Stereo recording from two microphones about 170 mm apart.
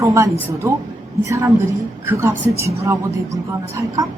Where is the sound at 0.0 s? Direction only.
15° right (ahead or behind).